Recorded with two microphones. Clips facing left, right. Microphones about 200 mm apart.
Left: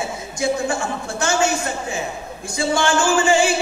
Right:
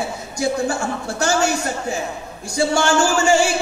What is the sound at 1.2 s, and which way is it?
A woman's voice, 40° right (ahead or behind).